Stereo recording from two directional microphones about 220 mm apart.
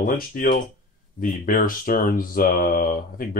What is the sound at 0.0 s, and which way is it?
Speech, 40° left (ahead or behind).